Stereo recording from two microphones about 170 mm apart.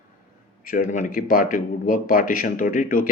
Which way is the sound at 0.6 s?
55° left (ahead or behind).